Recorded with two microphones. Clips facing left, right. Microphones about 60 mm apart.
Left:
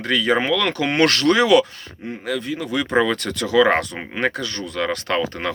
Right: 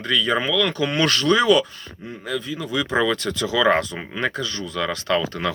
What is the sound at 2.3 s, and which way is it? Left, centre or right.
Speech, left.